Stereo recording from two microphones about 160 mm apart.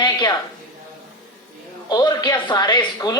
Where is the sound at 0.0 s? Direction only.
25° left (ahead or behind).